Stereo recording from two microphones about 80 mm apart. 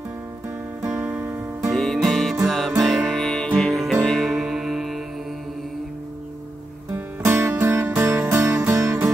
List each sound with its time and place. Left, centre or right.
0.8 s music: right
1.7 s music: centre
6.9 s music: right